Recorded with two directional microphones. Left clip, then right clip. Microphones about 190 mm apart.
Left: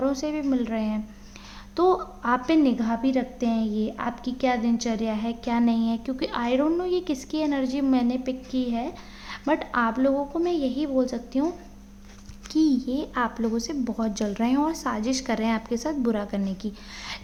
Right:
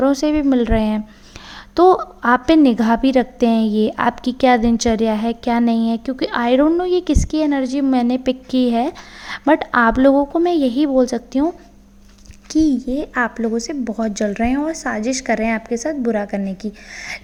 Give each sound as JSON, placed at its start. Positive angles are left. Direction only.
{"t": 0.0, "sound": "a woman's voice", "side_deg": -40}